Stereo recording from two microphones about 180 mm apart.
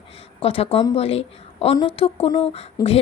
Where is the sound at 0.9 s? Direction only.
35° left (ahead or behind).